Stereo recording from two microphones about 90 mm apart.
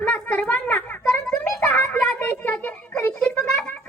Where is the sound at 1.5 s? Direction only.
20° left (ahead or behind).